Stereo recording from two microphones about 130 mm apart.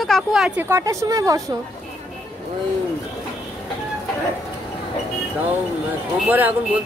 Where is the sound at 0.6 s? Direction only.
20° right (ahead or behind).